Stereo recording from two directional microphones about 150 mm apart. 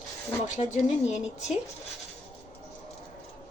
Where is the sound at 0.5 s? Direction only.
50° left (ahead or behind).